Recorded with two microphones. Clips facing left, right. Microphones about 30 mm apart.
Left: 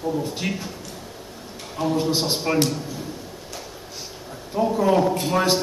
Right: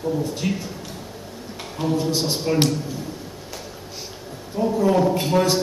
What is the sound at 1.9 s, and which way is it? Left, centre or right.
Speech, centre.